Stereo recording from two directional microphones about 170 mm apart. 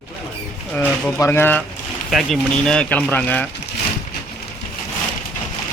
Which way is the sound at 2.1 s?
Centre (ahead or behind).